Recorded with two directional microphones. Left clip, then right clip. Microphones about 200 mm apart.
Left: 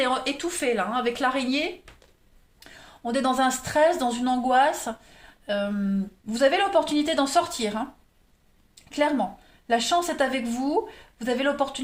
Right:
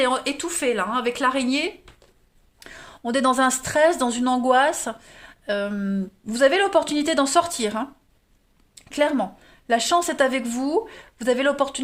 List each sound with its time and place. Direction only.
0.0 s a woman's voice: 40° right (ahead or behind)
8.7 s a sound: 45° right (ahead or behind)
9.6 s a woman's voice: 45° right (ahead or behind)